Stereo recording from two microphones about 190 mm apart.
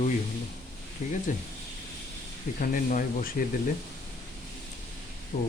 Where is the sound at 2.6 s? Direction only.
45° left (ahead or behind).